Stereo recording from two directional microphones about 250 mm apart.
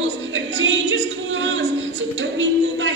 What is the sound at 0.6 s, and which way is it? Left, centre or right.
Singing, right.